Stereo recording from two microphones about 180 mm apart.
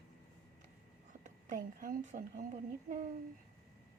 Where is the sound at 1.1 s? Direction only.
45° right (ahead or behind).